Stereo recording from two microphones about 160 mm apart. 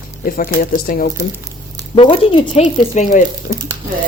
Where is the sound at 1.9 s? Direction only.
35° left (ahead or behind).